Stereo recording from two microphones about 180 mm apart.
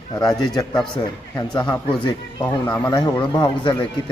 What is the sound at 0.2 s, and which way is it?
Speech, 20° left (ahead or behind).